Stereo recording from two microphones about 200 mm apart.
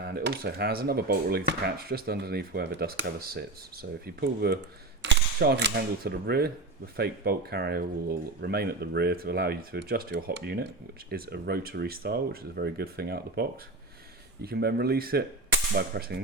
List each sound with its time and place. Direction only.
0.0 s speech: 55° right (ahead or behind)